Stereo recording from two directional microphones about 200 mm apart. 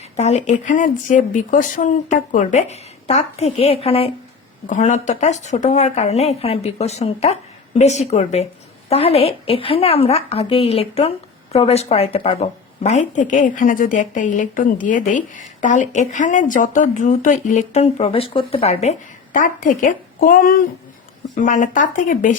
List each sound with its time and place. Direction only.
0.2 s a woman's voice: 35° left (ahead or behind)